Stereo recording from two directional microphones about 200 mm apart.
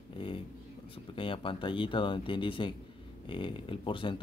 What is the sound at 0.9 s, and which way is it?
Speech, 25° left (ahead or behind).